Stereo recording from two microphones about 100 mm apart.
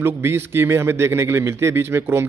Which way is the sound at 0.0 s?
25° right (ahead or behind).